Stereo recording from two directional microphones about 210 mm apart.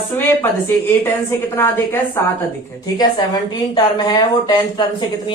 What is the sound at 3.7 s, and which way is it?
Speech, 20° left (ahead or behind).